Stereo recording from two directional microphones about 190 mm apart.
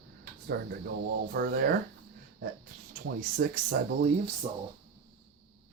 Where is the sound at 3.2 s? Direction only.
45° right (ahead or behind).